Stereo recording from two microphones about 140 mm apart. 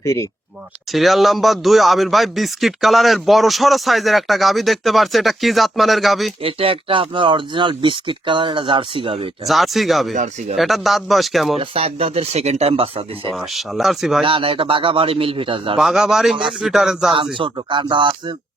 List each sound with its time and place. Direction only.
0.0 s speech: 25° left (ahead or behind)
0.9 s speech: centre (ahead or behind)
6.4 s speech: 40° right (ahead or behind)
9.5 s speech: centre (ahead or behind)
11.7 s speech: 45° right (ahead or behind)
13.7 s speech: centre (ahead or behind)
14.3 s speech: 40° right (ahead or behind)
15.8 s speech: 5° right (ahead or behind)
17.3 s speech: 35° right (ahead or behind)